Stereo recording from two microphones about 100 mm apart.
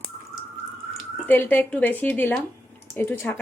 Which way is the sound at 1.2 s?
20° left (ahead or behind).